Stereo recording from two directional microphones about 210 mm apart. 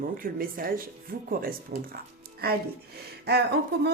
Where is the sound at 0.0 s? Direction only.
40° right (ahead or behind).